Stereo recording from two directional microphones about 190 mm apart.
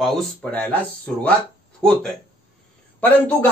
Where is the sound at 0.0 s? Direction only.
5° left (ahead or behind).